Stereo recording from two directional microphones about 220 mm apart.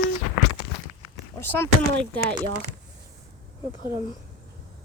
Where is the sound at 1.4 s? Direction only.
10° left (ahead or behind).